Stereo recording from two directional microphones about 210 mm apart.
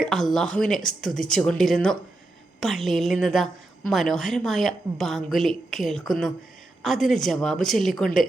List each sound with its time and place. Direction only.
0.0 s a woman's voice: centre (ahead or behind)